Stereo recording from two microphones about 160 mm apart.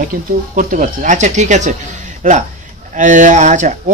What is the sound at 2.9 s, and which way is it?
Speech, 50° right (ahead or behind).